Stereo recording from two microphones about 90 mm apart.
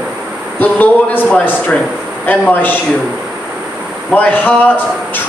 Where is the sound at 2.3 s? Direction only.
20° left (ahead or behind).